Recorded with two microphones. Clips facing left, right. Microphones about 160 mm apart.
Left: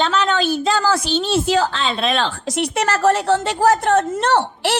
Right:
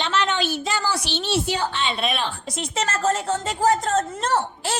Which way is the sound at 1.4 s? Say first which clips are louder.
Left 6 dB; 90° left.